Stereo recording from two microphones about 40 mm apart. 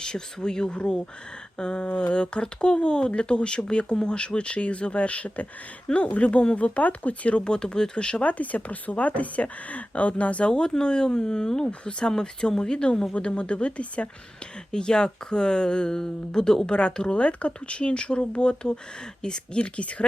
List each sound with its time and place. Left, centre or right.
0.0 s speech: centre; by 7.4 s left
7.4 s speech: left
8.2 s speech: left
10.5 s speech: left
14.7 s speech: centre
19.6 s speech: left